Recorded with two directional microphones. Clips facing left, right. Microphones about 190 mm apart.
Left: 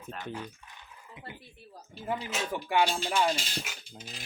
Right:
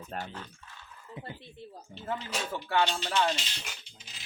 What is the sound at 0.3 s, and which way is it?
Speech, 15° left (ahead or behind).